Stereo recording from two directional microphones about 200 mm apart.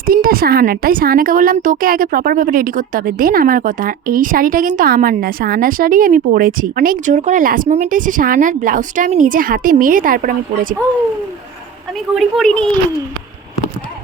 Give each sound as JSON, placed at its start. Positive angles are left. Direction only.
{"t": 0.0, "sound": "a woman's voice", "side_deg": -45}
{"t": 11.9, "sound": "a woman's voice", "side_deg": 0}